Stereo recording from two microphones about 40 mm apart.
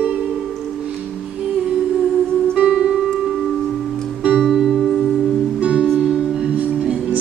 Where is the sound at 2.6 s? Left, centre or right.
Centre.